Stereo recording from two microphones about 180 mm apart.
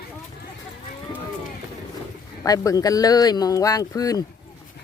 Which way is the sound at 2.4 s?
20° left (ahead or behind).